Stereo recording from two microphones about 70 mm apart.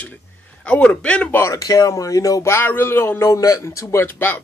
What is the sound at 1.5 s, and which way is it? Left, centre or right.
Speech, left.